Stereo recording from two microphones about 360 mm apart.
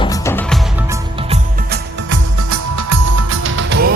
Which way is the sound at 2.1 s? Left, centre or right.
Right.